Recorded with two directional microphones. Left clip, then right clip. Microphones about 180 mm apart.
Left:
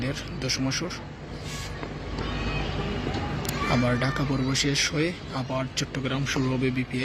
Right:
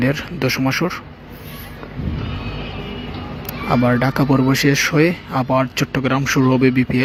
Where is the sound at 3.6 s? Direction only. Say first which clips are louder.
Right 9 dB; 20° right (ahead or behind).